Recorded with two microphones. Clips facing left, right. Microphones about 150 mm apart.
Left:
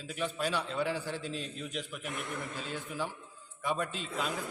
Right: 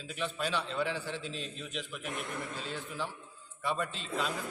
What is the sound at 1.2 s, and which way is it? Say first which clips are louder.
Speech: left 2 dB; 45° left (ahead or behind).